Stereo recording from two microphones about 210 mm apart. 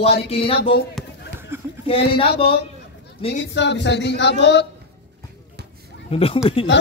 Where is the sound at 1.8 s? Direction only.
25° left (ahead or behind).